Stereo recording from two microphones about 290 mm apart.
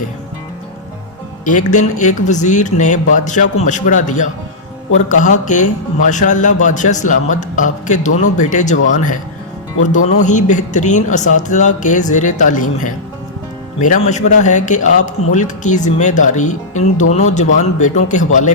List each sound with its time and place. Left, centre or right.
1.5 s speech: left
10.2 s speech: left